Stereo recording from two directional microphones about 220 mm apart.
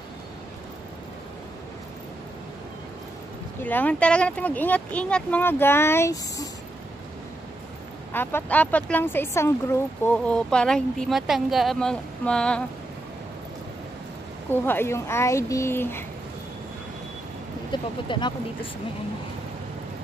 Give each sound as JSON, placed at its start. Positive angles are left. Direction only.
{"t": 3.6, "sound": "speech", "side_deg": 5}
{"t": 8.1, "sound": "speech", "side_deg": 10}
{"t": 14.5, "sound": "speech", "side_deg": 10}
{"t": 17.6, "sound": "speech", "side_deg": 20}